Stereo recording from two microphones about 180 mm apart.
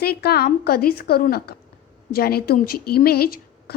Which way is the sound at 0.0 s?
60° left (ahead or behind).